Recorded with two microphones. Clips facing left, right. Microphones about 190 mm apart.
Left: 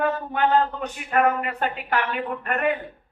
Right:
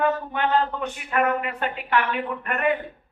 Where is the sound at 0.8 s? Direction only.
45° left (ahead or behind).